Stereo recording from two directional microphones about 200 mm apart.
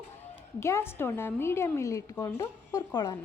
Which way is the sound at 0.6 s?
15° left (ahead or behind).